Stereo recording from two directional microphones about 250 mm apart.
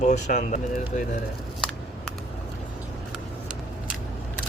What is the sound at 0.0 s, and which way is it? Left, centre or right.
Speech, left.